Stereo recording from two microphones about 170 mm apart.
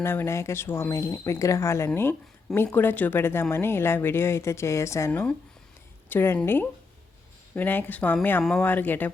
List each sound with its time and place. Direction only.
0.0 s speech: 15° left (ahead or behind)